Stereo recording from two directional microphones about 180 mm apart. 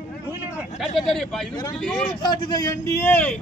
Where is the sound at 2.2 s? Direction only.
25° left (ahead or behind).